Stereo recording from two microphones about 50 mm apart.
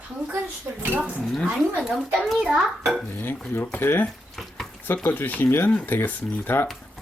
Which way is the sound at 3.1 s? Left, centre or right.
Left.